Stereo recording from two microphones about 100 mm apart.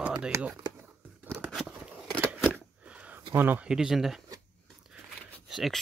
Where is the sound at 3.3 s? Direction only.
20° right (ahead or behind).